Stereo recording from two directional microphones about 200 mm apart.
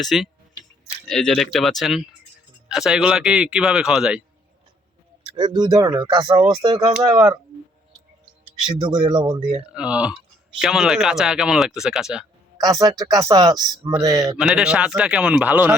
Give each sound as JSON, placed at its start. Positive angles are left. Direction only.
{"t": 0.0, "sound": "speech", "side_deg": 0}
{"t": 5.3, "sound": "speech", "side_deg": -25}
{"t": 8.8, "sound": "speech", "side_deg": -25}
{"t": 9.7, "sound": "speech", "side_deg": -5}
{"t": 12.5, "sound": "speech", "side_deg": -20}
{"t": 14.3, "sound": "speech", "side_deg": -5}